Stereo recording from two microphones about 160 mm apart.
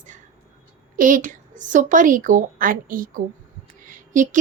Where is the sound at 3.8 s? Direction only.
55° right (ahead or behind).